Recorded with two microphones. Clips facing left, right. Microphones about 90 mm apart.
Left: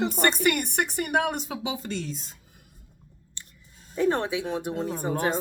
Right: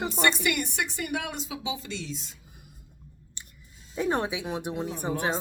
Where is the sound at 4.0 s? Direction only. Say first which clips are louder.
Left 3 dB; 15° right (ahead or behind).